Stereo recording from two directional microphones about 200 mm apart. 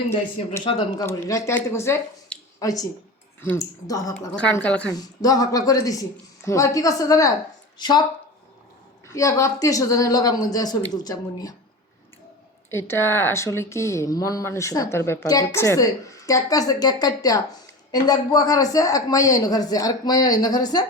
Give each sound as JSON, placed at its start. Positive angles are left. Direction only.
{"t": 0.6, "sound": "speech", "side_deg": 25}
{"t": 4.4, "sound": "speech", "side_deg": 5}
{"t": 4.9, "sound": "speech", "side_deg": 20}
{"t": 9.0, "sound": "speech", "side_deg": 15}
{"t": 12.7, "sound": "speech", "side_deg": 10}